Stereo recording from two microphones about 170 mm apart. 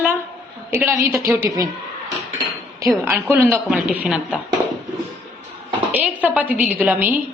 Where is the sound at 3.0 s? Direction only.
15° right (ahead or behind).